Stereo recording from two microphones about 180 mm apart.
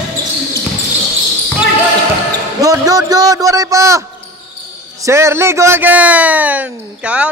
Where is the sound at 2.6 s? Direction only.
20° right (ahead or behind).